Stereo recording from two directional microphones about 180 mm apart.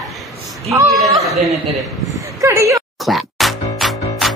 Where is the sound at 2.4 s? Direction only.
15° right (ahead or behind).